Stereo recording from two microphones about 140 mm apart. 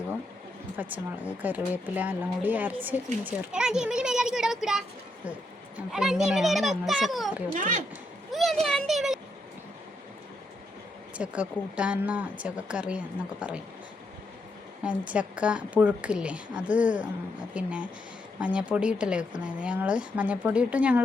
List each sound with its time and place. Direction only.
0.8 s a child's voice: 10° right (ahead or behind)
7.5 s speech: 65° right (ahead or behind)
8.3 s a sound: centre (ahead or behind)
8.6 s speech: 5° left (ahead or behind)
11.2 s speech: 10° right (ahead or behind)
14.8 s speech: 10° right (ahead or behind)